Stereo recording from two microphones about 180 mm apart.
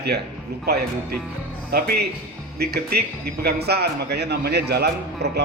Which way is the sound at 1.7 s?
60° right (ahead or behind).